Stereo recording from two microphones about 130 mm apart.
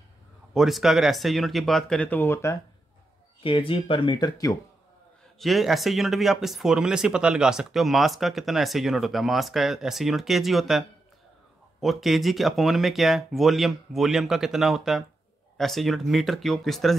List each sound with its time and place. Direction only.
0.6 s speech: centre (ahead or behind); by 2.6 s 20° left (ahead or behind)
3.4 s speech: 45° left (ahead or behind)
5.4 s speech: centre (ahead or behind)